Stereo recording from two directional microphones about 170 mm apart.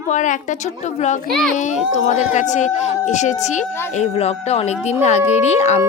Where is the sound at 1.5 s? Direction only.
45° left (ahead or behind).